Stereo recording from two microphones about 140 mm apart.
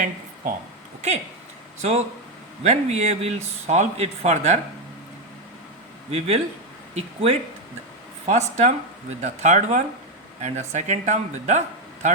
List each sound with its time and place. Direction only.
1.8 s speech: 55° right (ahead or behind)
6.1 s speech: 50° right (ahead or behind)